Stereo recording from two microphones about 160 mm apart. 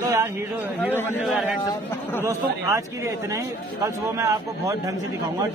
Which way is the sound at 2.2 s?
20° right (ahead or behind).